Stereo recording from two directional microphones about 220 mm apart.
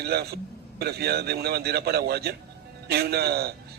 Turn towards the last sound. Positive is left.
turn(degrees=-45)  # may be behind; listen again after turning